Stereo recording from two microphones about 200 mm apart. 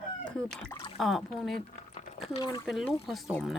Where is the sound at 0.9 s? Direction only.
Centre (ahead or behind).